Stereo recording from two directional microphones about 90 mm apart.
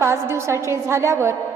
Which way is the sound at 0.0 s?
30° right (ahead or behind).